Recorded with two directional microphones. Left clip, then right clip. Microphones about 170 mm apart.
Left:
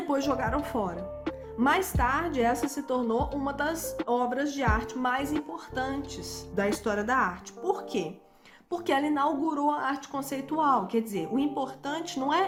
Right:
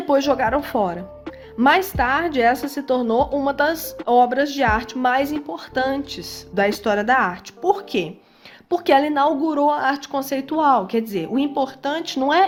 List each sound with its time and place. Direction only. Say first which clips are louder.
0.1 s a woman's voice: right 11 dB; 40° right (ahead or behind)